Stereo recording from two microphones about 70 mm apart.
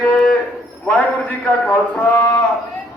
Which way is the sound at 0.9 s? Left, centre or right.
Centre.